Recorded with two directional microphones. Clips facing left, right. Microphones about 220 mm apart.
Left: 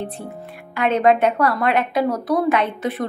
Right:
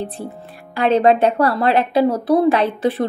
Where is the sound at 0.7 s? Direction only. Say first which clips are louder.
Right 3 dB; 30° right (ahead or behind).